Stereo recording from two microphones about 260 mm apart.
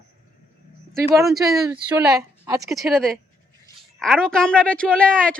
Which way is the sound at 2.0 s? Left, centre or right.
Centre.